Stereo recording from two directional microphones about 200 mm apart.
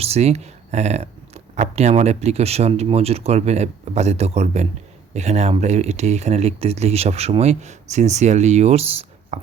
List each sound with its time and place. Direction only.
0.0 s speech: 30° right (ahead or behind)